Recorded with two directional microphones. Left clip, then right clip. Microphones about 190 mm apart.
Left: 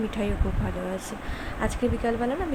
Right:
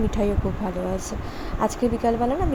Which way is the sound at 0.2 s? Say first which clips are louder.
Right 7 dB; 10° right (ahead or behind).